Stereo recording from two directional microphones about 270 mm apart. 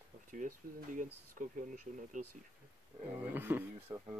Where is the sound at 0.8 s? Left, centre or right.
Right.